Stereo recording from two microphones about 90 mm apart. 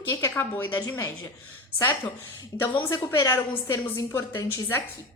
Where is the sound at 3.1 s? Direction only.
30° left (ahead or behind).